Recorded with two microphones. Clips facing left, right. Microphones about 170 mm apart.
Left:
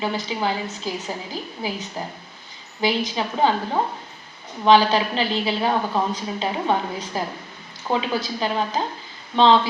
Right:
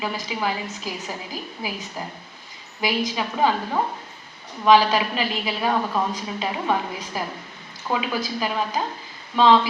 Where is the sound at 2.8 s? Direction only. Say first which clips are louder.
Left 2 dB; 25° left (ahead or behind).